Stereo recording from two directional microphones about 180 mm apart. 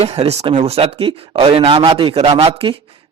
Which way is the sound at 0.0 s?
35° right (ahead or behind).